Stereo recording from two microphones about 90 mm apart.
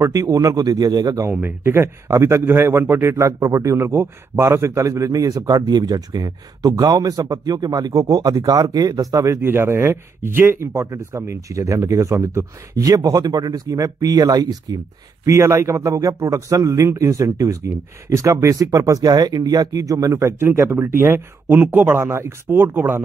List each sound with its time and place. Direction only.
0.0 s a man's voice: 40° right (ahead or behind)
1.3 s a man's voice: 25° right (ahead or behind); by 14.8 s 45° right (ahead or behind)
15.2 s a man's voice: 35° right (ahead or behind)